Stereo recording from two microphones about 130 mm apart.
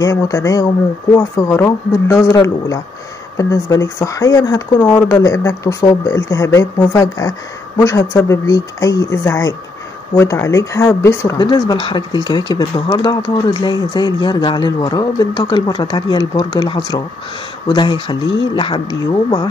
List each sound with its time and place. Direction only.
0.0 s a woman's voice: 25° left (ahead or behind)
11.3 s speech: 30° left (ahead or behind)